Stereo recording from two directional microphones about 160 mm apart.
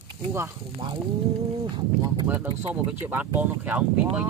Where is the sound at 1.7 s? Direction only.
25° right (ahead or behind).